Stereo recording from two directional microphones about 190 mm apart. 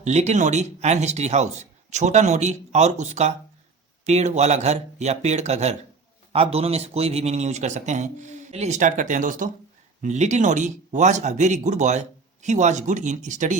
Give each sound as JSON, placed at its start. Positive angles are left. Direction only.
{"t": 0.0, "sound": "speech", "side_deg": -35}